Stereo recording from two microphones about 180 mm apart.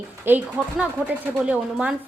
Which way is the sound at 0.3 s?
10° right (ahead or behind).